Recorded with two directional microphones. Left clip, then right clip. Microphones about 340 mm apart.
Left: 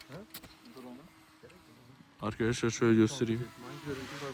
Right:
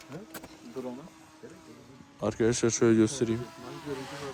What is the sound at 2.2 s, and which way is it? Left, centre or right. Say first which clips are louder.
Speech: right 6 dB; centre.